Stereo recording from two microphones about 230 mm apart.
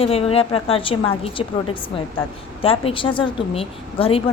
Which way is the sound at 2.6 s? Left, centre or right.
Left.